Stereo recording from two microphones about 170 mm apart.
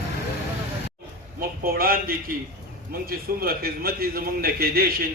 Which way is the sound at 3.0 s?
60° right (ahead or behind).